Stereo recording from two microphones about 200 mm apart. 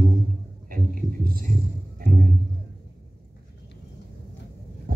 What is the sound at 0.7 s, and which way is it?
Speech, 45° right (ahead or behind).